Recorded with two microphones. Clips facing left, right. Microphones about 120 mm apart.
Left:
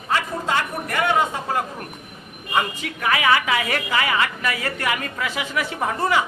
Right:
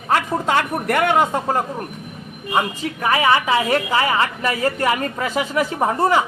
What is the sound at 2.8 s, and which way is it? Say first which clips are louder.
A woman's voice: right 3 dB; 35° right (ahead or behind).